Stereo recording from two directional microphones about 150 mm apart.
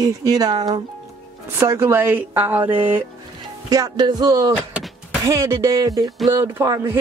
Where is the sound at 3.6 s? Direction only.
25° right (ahead or behind).